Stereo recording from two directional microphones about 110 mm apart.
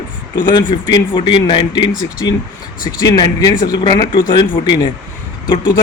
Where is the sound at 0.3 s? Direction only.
40° left (ahead or behind).